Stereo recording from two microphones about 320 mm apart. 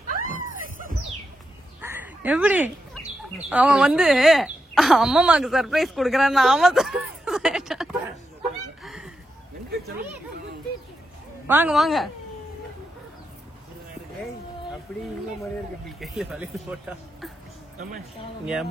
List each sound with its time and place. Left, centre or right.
0.1 s cat: right
1.8 s bird: centre
3.4 s speech: centre
8.8 s a sound: centre
11.4 s a woman's voice: centre
16.0 s a woman's voice: centre
18.4 s a woman's voice: centre